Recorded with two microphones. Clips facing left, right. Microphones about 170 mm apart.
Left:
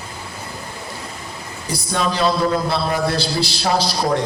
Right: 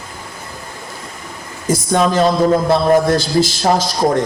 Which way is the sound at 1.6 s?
45° right (ahead or behind).